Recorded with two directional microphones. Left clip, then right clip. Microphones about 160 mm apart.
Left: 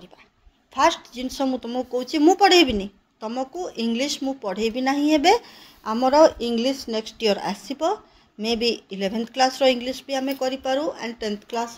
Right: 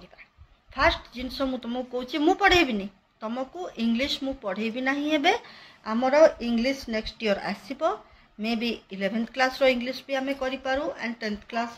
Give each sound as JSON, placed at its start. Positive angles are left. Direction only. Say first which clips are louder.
{"t": 0.7, "sound": "a woman's voice", "louder": "left 4 dB", "side_deg": 45}
{"t": 7.2, "sound": "a woman's voice", "louder": "left 5 dB", "side_deg": 55}